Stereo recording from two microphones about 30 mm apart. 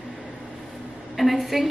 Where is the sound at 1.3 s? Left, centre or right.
Centre.